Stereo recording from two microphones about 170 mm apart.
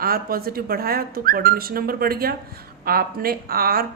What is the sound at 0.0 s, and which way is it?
Speech, 60° right (ahead or behind).